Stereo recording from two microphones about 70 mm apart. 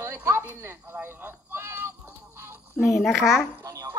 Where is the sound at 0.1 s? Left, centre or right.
Right.